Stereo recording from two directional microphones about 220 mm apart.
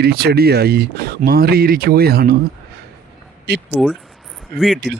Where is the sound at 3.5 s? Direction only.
50° right (ahead or behind).